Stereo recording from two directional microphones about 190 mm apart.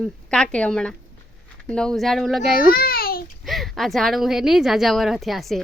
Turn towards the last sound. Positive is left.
turn(degrees=0)  # may be behind; listen again after turning